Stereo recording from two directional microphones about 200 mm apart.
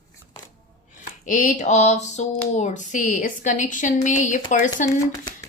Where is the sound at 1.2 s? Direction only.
40° left (ahead or behind).